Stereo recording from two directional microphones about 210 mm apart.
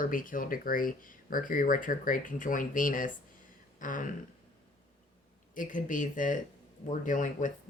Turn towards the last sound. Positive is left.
turn(degrees=40)  # may be behind; listen again after turning